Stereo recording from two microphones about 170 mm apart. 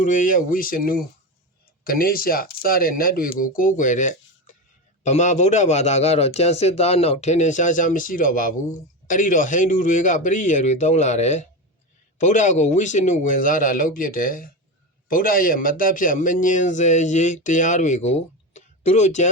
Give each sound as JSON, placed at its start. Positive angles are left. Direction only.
{"t": 0.0, "sound": "a man's voice", "side_deg": 50}